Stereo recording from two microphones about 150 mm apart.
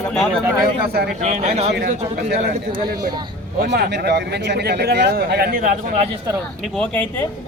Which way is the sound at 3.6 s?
90° right.